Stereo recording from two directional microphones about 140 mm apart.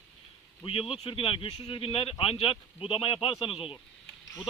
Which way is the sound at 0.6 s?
40° left (ahead or behind).